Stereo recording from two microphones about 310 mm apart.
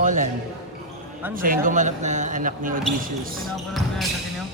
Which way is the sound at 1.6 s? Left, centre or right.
Right.